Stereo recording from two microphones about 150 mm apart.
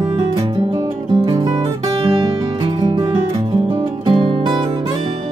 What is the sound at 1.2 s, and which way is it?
Music, 25° right (ahead or behind).